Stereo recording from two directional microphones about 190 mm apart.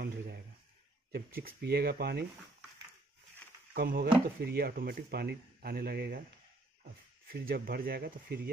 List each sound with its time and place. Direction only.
1.1 s speech: 55° right (ahead or behind)
3.7 s speech: 55° right (ahead or behind)